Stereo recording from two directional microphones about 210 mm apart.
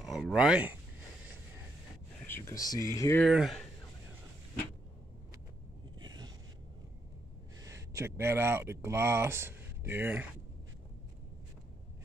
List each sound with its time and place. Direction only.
0.0 s speech: centre (ahead or behind)
2.2 s speech: 10° left (ahead or behind)
3.3 s speech: centre (ahead or behind)
5.9 s a sound: 20° right (ahead or behind)
7.6 s speech: 15° right (ahead or behind)